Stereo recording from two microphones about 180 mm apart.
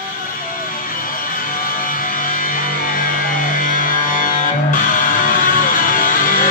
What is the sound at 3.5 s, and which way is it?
Music, 50° left (ahead or behind).